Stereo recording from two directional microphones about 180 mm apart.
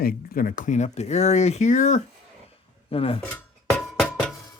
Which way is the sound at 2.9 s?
30° left (ahead or behind).